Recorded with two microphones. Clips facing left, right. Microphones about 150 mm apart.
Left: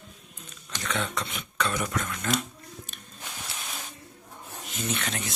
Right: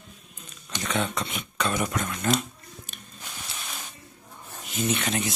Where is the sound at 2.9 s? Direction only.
5° right (ahead or behind).